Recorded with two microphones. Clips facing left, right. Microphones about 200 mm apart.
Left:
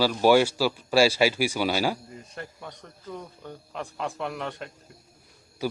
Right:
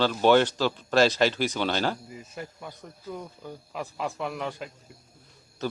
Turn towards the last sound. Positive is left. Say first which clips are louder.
# left 2 dB
turn(degrees=10)  # may be behind; listen again after turning